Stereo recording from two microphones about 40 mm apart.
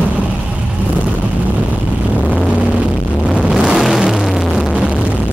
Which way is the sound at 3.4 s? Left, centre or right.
Right.